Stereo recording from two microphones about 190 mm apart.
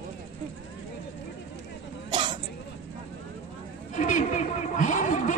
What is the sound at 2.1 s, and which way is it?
Cough, 25° right (ahead or behind).